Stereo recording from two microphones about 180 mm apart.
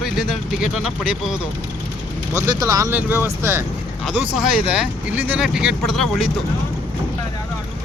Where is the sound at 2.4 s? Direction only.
20° right (ahead or behind); by 6.2 s centre (ahead or behind).